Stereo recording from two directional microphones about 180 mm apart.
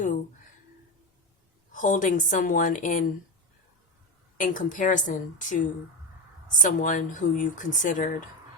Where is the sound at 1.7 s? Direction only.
45° left (ahead or behind).